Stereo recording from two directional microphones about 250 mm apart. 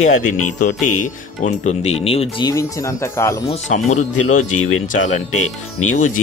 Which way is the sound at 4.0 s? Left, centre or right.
Left.